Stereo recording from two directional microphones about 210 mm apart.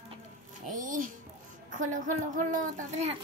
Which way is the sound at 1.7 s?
35° right (ahead or behind).